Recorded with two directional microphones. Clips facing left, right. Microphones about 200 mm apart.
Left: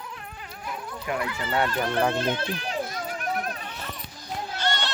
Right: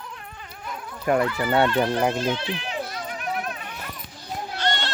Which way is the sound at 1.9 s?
15° right (ahead or behind).